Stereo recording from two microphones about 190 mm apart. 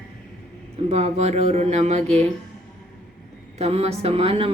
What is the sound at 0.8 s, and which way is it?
Speech, 35° right (ahead or behind).